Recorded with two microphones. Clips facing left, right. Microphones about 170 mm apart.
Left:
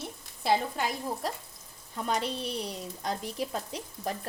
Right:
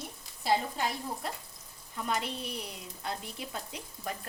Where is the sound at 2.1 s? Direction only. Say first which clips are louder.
Left 3 dB; 30° left (ahead or behind).